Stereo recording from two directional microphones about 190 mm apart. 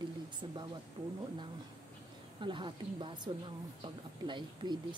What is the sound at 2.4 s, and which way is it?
A woman's voice, 25° right (ahead or behind).